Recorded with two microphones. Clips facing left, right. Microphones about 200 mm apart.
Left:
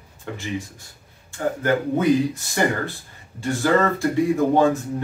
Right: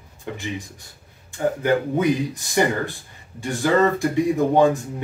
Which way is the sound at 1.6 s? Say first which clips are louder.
Left 1 dB; 15° right (ahead or behind).